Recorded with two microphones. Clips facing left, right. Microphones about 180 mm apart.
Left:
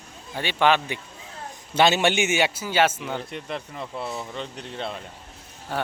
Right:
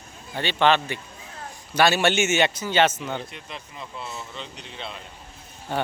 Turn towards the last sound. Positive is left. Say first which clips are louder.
# right 2 dB
turn(degrees=0)  # may be behind; listen again after turning